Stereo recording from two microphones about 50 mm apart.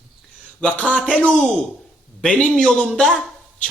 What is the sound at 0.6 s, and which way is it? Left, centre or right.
A man's voice, centre.